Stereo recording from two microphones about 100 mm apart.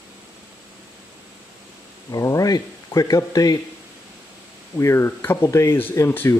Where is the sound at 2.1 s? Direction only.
35° left (ahead or behind).